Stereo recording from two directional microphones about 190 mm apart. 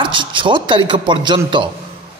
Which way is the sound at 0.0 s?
25° right (ahead or behind).